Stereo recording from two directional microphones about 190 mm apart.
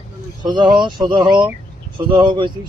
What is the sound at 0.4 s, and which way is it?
Speech, 25° right (ahead or behind).